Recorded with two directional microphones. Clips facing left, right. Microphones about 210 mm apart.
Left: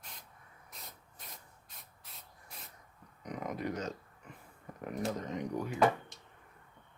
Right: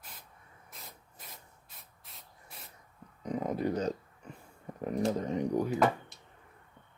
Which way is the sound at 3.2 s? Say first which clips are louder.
Right 6 dB; 30° right (ahead or behind).